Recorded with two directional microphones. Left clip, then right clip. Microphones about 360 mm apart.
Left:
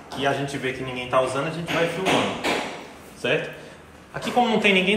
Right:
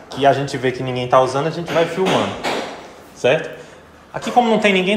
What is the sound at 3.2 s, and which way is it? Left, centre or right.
A man's voice, centre.